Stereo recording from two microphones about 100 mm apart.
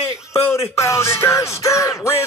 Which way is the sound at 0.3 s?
25° left (ahead or behind).